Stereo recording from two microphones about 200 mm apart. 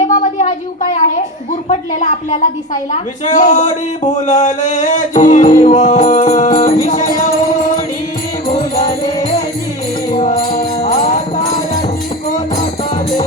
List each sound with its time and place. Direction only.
0.1 s a sound: 40° left (ahead or behind)
1.7 s speech: 35° left (ahead or behind)
8.4 s music: 35° left (ahead or behind)
10.4 s music: 25° left (ahead or behind)
10.8 s jingle bell: 40° left (ahead or behind)